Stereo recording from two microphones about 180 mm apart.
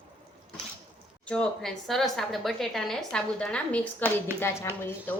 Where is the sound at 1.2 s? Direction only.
5° left (ahead or behind).